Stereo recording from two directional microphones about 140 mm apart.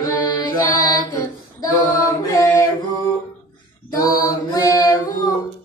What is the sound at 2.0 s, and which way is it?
Chant, 25° left (ahead or behind).